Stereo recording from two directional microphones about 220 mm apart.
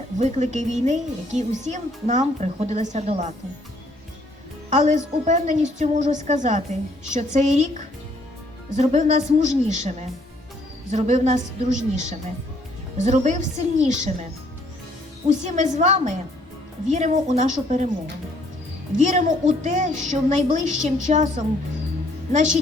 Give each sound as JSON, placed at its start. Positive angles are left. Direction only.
{"t": 0.2, "sound": "speech", "side_deg": -30}
{"t": 4.7, "sound": "speech", "side_deg": -35}
{"t": 10.9, "sound": "speech", "side_deg": -30}
{"t": 15.3, "sound": "speech", "side_deg": -35}
{"t": 18.9, "sound": "a woman's voice", "side_deg": -35}